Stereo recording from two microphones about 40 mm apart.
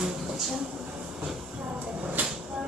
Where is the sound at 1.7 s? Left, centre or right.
Right.